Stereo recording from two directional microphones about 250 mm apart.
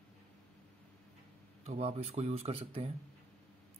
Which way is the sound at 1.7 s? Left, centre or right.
Right.